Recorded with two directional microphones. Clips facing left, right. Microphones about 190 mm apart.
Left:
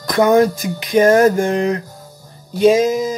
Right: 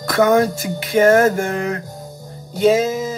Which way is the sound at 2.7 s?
15° left (ahead or behind).